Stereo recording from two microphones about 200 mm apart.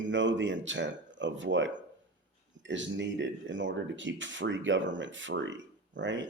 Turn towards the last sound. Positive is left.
turn(degrees=-65)  # may be behind; listen again after turning